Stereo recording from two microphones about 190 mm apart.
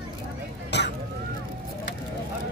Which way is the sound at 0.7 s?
65° left (ahead or behind).